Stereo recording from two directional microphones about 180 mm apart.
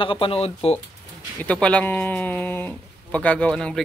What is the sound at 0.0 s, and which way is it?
Speech, 30° left (ahead or behind).